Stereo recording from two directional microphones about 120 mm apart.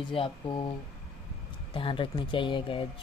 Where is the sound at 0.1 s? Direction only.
45° left (ahead or behind).